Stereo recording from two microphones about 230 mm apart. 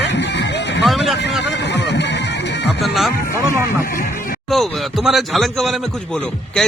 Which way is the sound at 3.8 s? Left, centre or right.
Left.